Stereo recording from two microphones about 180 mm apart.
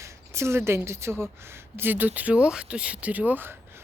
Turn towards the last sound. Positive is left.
turn(degrees=-10)  # may be behind; listen again after turning